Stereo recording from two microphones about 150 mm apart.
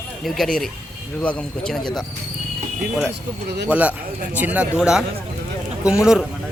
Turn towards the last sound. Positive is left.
turn(degrees=-5)  # may be behind; listen again after turning